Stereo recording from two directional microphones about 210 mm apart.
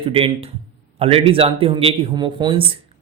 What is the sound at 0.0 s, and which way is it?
A man's voice, 25° right (ahead or behind).